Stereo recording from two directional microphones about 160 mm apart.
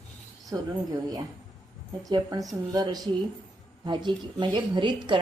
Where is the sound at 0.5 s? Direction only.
20° right (ahead or behind).